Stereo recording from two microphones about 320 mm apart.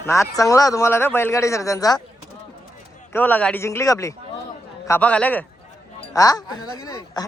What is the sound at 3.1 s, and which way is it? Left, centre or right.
A man's voice, centre.